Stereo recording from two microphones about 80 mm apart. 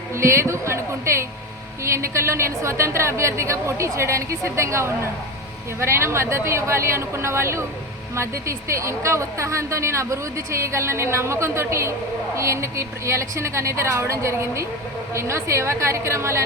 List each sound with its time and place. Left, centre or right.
0.1 s a woman's voice: right